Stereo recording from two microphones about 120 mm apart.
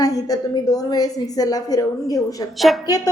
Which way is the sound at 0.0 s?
30° left (ahead or behind).